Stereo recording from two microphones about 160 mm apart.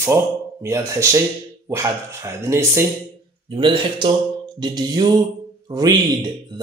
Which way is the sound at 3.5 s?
30° right (ahead or behind).